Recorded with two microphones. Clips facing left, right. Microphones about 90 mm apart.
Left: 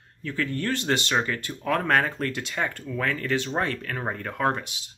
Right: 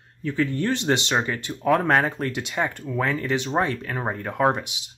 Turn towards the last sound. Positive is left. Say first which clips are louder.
# right 4 dB
turn(degrees=-15)  # may be behind; listen again after turning